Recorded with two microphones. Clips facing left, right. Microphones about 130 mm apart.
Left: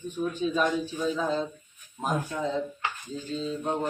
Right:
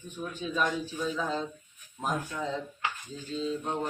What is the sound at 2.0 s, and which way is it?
Speech, 5° left (ahead or behind).